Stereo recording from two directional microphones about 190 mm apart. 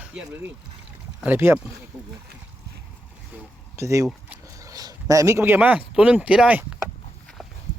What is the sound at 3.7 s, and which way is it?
Speech, 15° right (ahead or behind).